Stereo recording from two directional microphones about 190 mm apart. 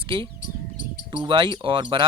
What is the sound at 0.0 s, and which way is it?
Speech, 25° right (ahead or behind).